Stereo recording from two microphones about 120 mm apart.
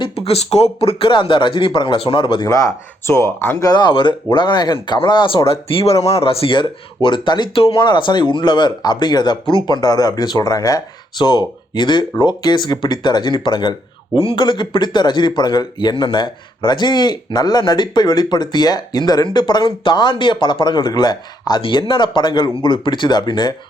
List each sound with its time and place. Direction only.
0.3 s speech: 60° left (ahead or behind); by 2.5 s 45° left (ahead or behind)
3.1 s speech: 25° left (ahead or behind)
3.6 s speech: 35° left (ahead or behind)